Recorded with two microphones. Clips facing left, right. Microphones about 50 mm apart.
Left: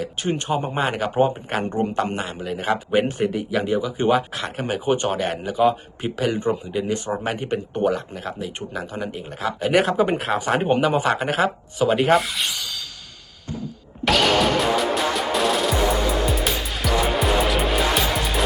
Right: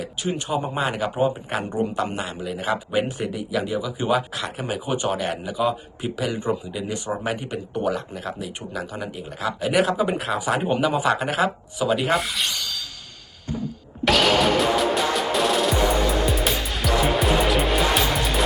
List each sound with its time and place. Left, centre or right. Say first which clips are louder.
0.0 s speech: left 2 dB; left
0.4 s speech: left 1 dB; left
12.1 s rub: left 3 dB; centre
14.0 s music: even; centre